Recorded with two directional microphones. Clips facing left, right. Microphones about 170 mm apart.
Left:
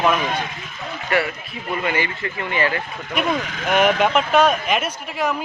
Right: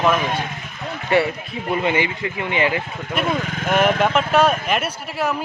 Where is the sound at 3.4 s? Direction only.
50° right (ahead or behind).